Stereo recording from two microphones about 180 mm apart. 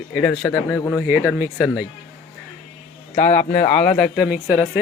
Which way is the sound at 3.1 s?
45° left (ahead or behind).